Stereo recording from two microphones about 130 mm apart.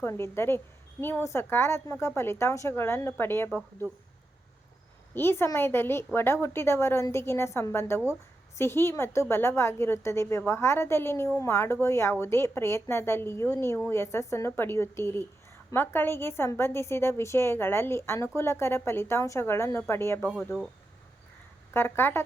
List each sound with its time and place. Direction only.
0.0 s a woman's voice: 20° left (ahead or behind)
5.1 s a woman's voice: 15° left (ahead or behind)
21.7 s a woman's voice: 15° left (ahead or behind)